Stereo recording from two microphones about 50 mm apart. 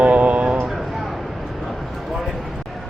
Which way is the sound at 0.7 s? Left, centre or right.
Centre.